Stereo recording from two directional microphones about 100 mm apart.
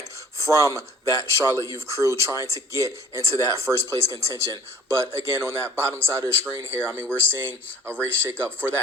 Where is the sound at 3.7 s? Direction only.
10° right (ahead or behind).